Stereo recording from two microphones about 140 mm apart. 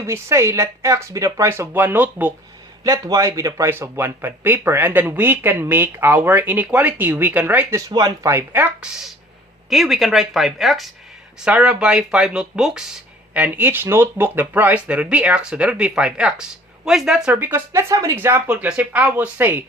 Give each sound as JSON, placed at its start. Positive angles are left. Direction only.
{"t": 0.0, "sound": "speech", "side_deg": -20}
{"t": 2.8, "sound": "speech", "side_deg": -25}
{"t": 7.8, "sound": "speech", "side_deg": -30}
{"t": 9.6, "sound": "speech", "side_deg": 0}